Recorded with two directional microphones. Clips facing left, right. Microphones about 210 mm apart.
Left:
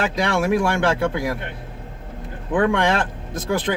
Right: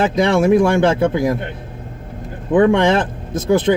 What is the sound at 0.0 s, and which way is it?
Speech, 20° right (ahead or behind).